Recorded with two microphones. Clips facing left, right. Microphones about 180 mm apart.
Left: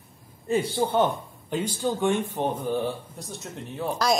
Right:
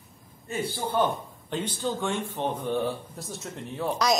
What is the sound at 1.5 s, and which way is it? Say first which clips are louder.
Speech: left 3 dB; 10° left (ahead or behind).